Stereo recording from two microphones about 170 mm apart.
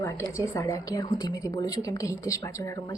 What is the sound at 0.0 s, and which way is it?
A woman's voice, 20° left (ahead or behind).